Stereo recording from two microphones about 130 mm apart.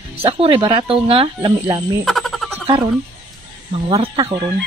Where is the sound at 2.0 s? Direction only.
Centre (ahead or behind).